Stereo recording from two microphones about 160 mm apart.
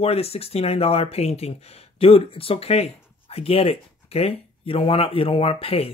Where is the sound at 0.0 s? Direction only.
40° left (ahead or behind).